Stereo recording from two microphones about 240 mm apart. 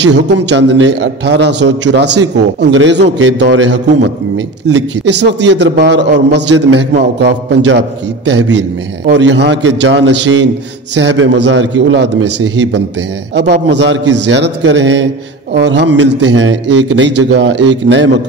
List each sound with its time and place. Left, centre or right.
0.0 s a man's voice: right